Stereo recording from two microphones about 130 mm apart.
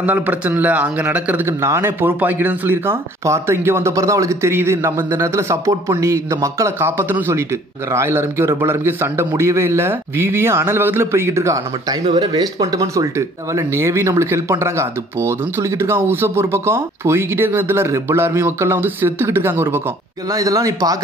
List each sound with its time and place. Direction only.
0.0 s a man's voice: 10° right (ahead or behind)